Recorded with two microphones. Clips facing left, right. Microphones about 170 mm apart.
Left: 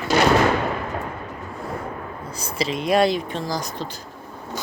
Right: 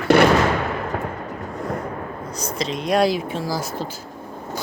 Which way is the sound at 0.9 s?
65° right (ahead or behind).